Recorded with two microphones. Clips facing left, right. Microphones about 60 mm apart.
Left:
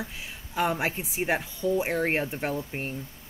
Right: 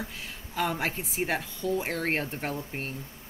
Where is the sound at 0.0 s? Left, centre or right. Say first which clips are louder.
Left 1 dB; centre.